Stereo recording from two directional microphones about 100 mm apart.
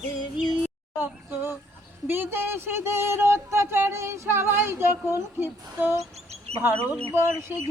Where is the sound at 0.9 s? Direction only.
20° right (ahead or behind).